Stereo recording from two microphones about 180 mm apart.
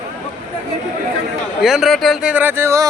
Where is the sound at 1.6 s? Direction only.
Centre (ahead or behind).